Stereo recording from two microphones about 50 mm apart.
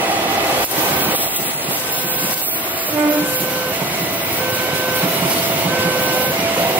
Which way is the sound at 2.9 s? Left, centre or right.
Right.